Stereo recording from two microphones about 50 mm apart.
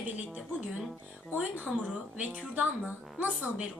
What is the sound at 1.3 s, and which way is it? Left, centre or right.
Speech, right.